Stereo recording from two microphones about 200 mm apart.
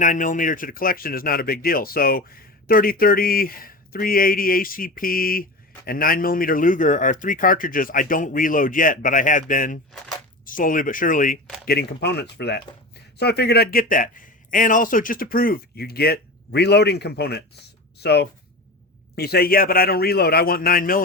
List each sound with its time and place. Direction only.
0.0 s speech: 40° left (ahead or behind)
17.9 s writing: 55° left (ahead or behind)
19.1 s speech: 50° left (ahead or behind)